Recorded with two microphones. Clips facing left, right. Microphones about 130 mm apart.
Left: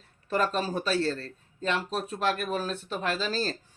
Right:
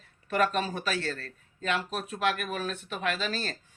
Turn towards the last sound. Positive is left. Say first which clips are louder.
# left 2 dB
turn(degrees=35)  # may be behind; listen again after turning